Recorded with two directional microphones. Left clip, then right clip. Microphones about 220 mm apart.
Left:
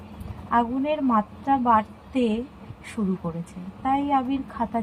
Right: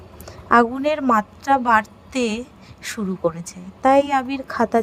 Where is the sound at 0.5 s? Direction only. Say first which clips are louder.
Right 7 dB; 55° right (ahead or behind).